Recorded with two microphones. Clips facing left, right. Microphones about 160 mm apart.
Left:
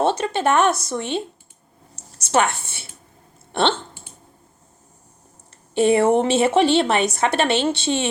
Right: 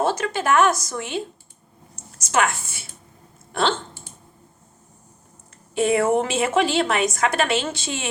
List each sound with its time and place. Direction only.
0.3 s a woman's voice: 30° left (ahead or behind)
2.3 s a woman's voice: 30° left (ahead or behind)
5.7 s a woman's voice: 30° left (ahead or behind)